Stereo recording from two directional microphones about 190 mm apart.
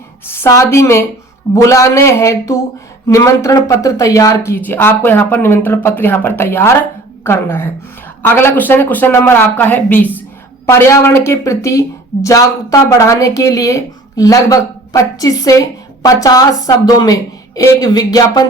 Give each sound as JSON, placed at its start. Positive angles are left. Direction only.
{"t": 0.3, "sound": "speech", "side_deg": 15}